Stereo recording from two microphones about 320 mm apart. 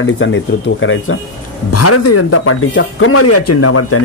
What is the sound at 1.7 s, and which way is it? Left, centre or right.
Speech, left.